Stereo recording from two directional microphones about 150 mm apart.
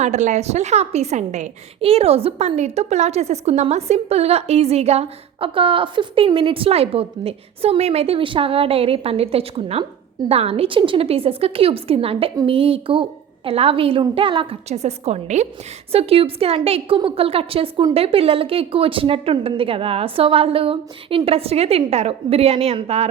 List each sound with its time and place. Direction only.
0.0 s a woman's voice: 50° right (ahead or behind)